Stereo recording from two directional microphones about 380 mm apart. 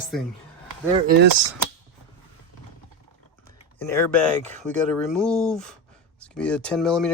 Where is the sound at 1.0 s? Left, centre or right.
Right.